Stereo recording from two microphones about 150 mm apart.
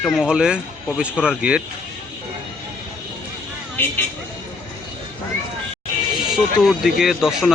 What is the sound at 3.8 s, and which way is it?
Speech, 10° left (ahead or behind).